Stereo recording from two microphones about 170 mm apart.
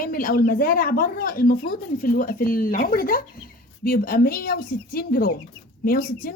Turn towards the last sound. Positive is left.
turn(degrees=60)  # may be behind; listen again after turning